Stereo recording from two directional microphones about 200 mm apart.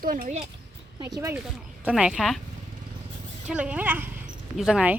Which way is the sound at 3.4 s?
5° right (ahead or behind).